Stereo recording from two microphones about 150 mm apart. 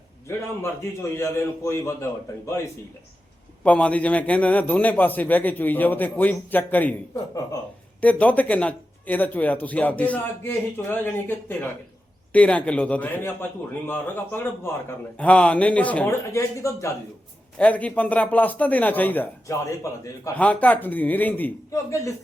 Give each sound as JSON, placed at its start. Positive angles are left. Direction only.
{"t": 0.3, "sound": "a man's voice", "side_deg": 15}
{"t": 3.6, "sound": "speech", "side_deg": 10}
{"t": 8.0, "sound": "speech", "side_deg": 10}
{"t": 17.6, "sound": "speech", "side_deg": 10}
{"t": 20.3, "sound": "speech", "side_deg": 10}